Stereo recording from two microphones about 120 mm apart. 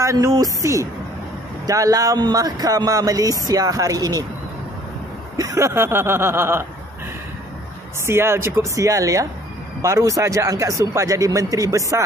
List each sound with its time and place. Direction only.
0.0 s speech: 25° right (ahead or behind)
5.4 s speech: 25° right (ahead or behind)
8.1 s speech: 20° right (ahead or behind)